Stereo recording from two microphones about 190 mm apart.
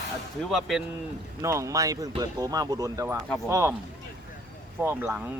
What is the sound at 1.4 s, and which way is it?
Speech, 15° right (ahead or behind).